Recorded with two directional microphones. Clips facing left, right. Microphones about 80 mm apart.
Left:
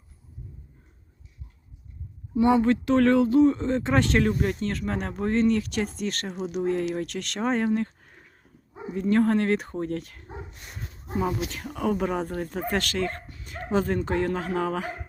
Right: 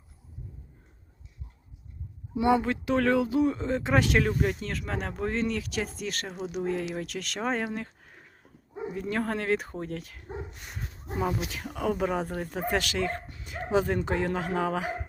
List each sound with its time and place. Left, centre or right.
2.5 s speech: centre
13.2 s dog: right
13.5 s speech: centre